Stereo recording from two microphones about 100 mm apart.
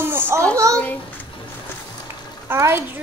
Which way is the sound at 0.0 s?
25° right (ahead or behind).